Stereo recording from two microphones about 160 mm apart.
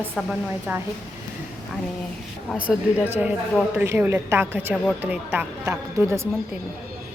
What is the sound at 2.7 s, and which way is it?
Speech, 10° right (ahead or behind).